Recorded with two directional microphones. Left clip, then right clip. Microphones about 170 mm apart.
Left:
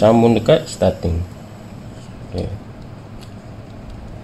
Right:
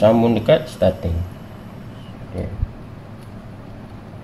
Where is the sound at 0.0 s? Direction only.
30° left (ahead or behind).